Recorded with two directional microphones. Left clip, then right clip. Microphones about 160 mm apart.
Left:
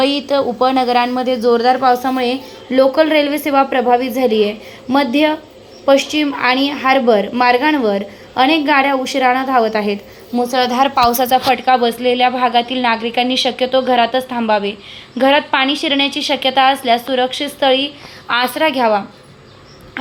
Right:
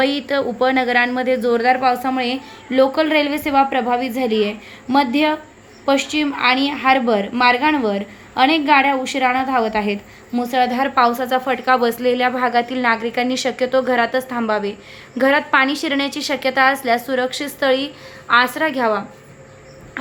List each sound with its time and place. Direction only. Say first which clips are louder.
0.0 s a woman's voice: left 4 dB; 5° left (ahead or behind)
10.3 s a woman's voice: left 4 dB; 10° right (ahead or behind)
10.7 s a woman's voice: left 6 dB; centre (ahead or behind)
10.9 s a woman's voice: left 3 dB; 15° left (ahead or behind)
11.4 s a woman's voice: left 4 dB; 5° left (ahead or behind)
16.0 s speech: left 5 dB; 45° right (ahead or behind)
16.5 s a woman's voice: left 3 dB; 5° left (ahead or behind)